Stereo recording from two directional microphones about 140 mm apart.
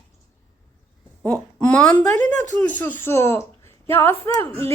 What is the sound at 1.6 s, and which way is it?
A woman's voice, 5° left (ahead or behind).